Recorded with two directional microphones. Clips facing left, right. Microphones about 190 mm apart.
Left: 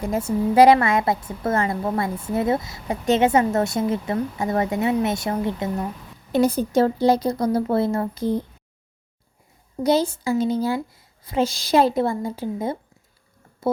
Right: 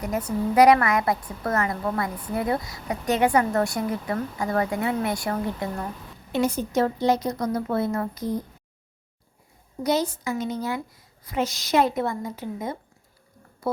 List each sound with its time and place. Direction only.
0.0 s a woman's voice: 25° left (ahead or behind)
6.3 s a woman's voice: 35° left (ahead or behind)
9.8 s a woman's voice: 30° left (ahead or behind)